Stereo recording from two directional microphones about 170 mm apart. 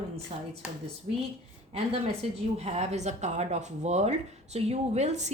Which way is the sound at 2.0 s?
40° right (ahead or behind).